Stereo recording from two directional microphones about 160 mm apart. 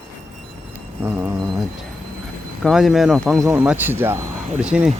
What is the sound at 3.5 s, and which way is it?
Speech, 10° right (ahead or behind).